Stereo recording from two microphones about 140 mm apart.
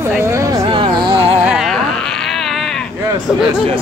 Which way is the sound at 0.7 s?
35° right (ahead or behind).